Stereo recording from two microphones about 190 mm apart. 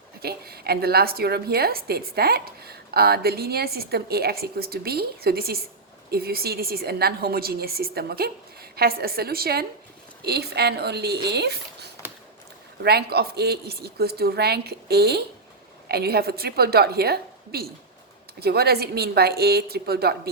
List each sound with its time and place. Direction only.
0.2 s a woman's voice: 55° right (ahead or behind)